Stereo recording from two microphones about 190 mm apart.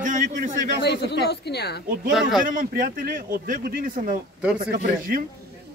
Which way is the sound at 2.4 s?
45° right (ahead or behind).